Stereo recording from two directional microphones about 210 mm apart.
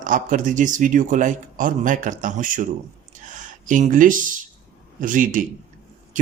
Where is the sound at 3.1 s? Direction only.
35° right (ahead or behind).